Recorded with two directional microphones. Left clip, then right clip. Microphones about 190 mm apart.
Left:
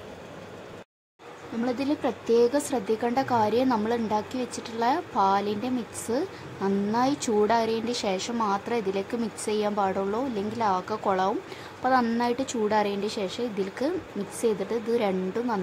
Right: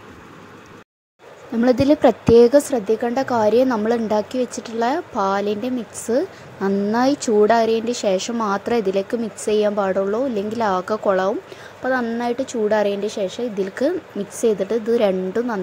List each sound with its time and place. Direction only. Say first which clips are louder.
1.6 s speech: right 13 dB; 35° right (ahead or behind)
2.7 s a woman's voice: right 6 dB; 20° right (ahead or behind)